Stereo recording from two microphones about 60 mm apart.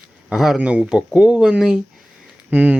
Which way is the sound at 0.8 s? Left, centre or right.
Centre.